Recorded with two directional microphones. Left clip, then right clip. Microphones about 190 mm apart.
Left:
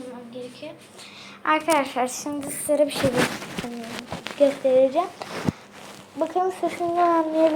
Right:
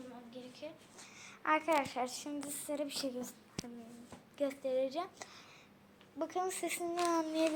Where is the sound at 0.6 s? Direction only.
40° right (ahead or behind).